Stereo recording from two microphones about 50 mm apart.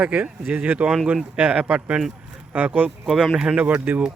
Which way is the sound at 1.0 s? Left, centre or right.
Right.